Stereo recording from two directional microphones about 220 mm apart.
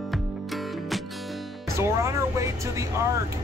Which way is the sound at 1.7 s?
15° right (ahead or behind).